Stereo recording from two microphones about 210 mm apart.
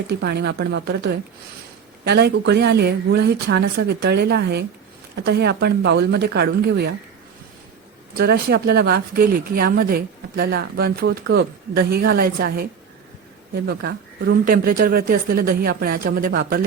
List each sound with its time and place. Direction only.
0.1 s speech: 55° right (ahead or behind)
8.1 s speech: 50° right (ahead or behind)
13.7 s speech: 50° right (ahead or behind)